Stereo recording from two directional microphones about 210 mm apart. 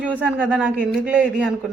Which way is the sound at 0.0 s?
5° right (ahead or behind).